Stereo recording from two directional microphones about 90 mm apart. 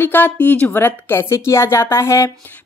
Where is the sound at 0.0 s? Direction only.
20° left (ahead or behind).